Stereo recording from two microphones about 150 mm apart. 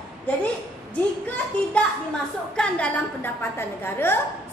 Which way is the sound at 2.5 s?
10° left (ahead or behind).